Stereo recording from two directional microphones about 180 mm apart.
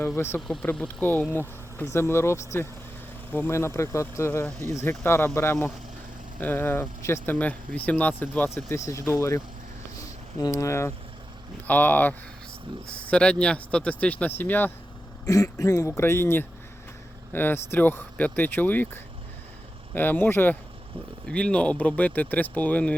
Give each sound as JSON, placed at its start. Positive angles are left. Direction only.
{"t": 0.3, "sound": "speech", "side_deg": 5}
{"t": 19.9, "sound": "speech", "side_deg": 10}